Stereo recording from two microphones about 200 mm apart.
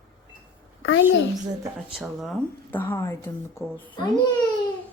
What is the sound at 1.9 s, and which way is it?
Speech, centre (ahead or behind).